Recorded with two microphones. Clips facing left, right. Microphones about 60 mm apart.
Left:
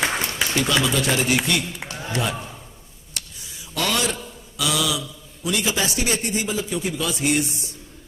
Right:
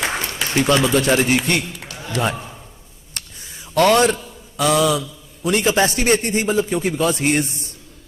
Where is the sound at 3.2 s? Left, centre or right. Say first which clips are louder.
Right 1 dB; right.